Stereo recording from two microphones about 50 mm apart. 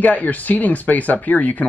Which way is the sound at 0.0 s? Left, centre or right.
Left.